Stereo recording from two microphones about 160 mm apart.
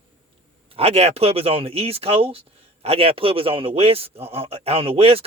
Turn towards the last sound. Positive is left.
turn(degrees=-35)  # may be behind; listen again after turning